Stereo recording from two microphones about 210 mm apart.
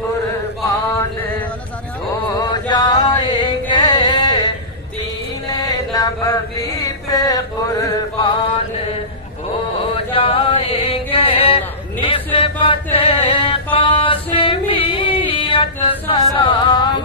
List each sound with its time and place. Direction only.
2.5 s chant: 20° left (ahead or behind)
9.9 s chant: 25° left (ahead or behind)
16.3 s music: 25° left (ahead or behind)